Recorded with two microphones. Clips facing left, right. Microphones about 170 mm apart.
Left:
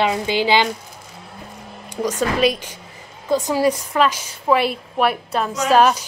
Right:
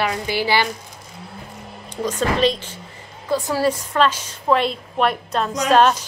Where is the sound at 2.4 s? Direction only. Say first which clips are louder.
Left 1 dB; 10° left (ahead or behind).